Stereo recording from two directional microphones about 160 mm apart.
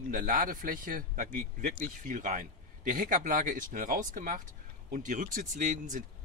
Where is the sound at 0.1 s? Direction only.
55° right (ahead or behind).